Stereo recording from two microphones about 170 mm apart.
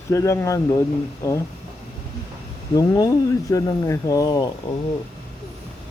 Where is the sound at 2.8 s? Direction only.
20° left (ahead or behind).